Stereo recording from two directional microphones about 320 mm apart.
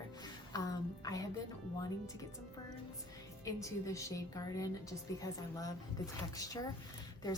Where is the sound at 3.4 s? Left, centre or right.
Centre.